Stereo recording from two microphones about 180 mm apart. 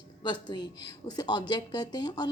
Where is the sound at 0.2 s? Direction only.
25° left (ahead or behind).